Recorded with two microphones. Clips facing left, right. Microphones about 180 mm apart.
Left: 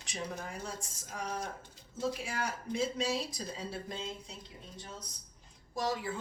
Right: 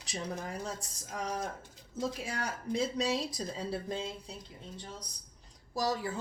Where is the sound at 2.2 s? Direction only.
35° right (ahead or behind).